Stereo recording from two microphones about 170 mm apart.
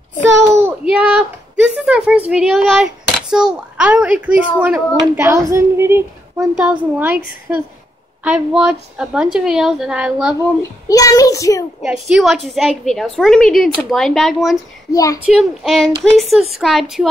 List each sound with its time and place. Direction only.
0.6 s a child's voice: 10° right (ahead or behind)
10.6 s a child's voice: 20° left (ahead or behind)
11.8 s a woman's voice: 5° right (ahead or behind)
14.9 s a child's voice: 20° left (ahead or behind)
15.2 s a woman's voice: 5° right (ahead or behind)